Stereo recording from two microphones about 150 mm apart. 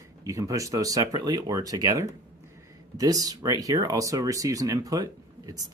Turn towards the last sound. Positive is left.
turn(degrees=-25)  # may be behind; listen again after turning